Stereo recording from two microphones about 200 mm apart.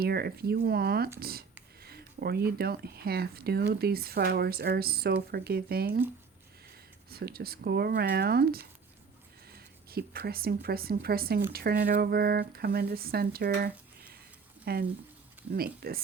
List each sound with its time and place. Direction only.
0.0 s speech: 50° right (ahead or behind)
7.1 s speech: 50° right (ahead or behind)